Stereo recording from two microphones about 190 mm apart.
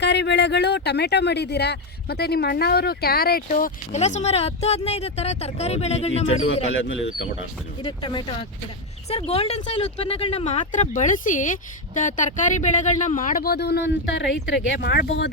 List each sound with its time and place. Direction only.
0.0 s speech: 65° left (ahead or behind); by 6.5 s 35° left (ahead or behind)
7.8 s speech: 25° left (ahead or behind); by 15.3 s 60° left (ahead or behind)